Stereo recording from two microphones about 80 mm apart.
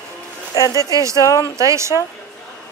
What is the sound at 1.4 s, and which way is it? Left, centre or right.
Speech, right.